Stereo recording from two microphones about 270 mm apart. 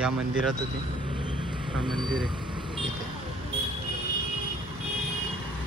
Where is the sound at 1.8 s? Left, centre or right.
Centre.